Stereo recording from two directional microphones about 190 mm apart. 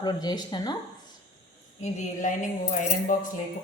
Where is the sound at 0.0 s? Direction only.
20° left (ahead or behind).